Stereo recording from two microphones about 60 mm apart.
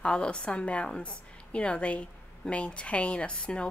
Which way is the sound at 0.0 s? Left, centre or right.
Centre.